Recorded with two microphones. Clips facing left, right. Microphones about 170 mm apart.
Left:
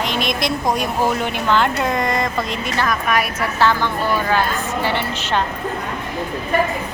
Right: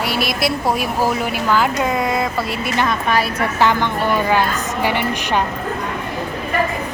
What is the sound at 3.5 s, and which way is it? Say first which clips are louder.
Speech: even; 15° right (ahead or behind).